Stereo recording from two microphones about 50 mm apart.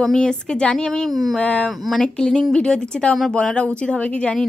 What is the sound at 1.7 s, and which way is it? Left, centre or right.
Speech, centre.